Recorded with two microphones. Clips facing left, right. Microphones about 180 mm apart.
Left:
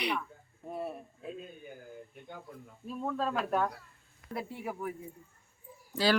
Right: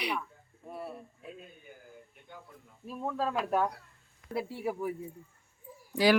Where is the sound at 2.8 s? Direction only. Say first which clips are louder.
Even; 10° right (ahead or behind).